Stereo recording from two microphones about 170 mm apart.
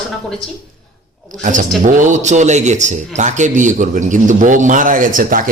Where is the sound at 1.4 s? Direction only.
50° right (ahead or behind).